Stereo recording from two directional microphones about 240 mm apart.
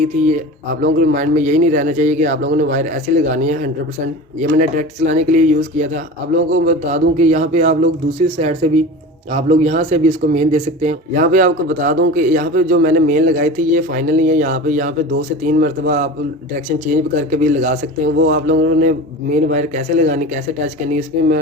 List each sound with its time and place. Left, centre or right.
0.0 s a man's voice: right